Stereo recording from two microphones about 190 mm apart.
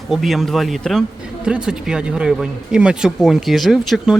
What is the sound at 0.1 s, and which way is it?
Speech, centre (ahead or behind).